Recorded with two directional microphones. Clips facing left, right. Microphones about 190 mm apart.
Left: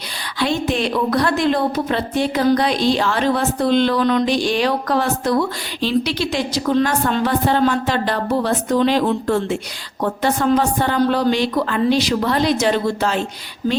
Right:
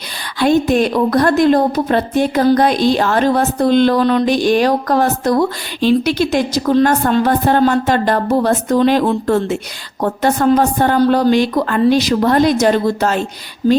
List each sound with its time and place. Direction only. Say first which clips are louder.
0.3 s speech: right 7 dB; 45° right (ahead or behind)